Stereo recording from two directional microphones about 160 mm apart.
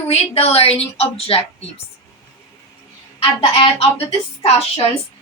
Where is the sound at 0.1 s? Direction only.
40° left (ahead or behind).